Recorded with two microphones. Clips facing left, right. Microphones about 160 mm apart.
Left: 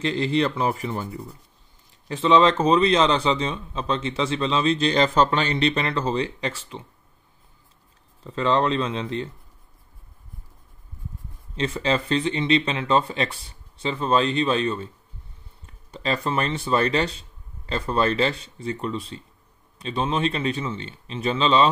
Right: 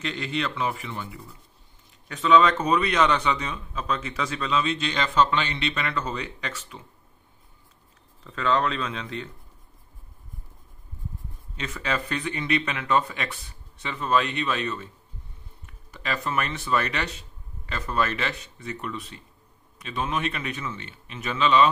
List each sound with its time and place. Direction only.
0.0 s speech: 30° left (ahead or behind)
1.0 s a man's voice: 25° left (ahead or behind)
8.2 s a man's voice: 30° left (ahead or behind)
11.5 s a man's voice: 30° left (ahead or behind)